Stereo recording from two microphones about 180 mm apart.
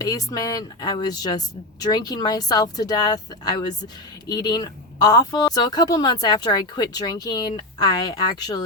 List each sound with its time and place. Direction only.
0.0 s a woman's voice: 20° left (ahead or behind)